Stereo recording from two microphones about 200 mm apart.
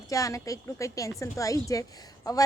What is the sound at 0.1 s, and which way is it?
Speech, 15° left (ahead or behind).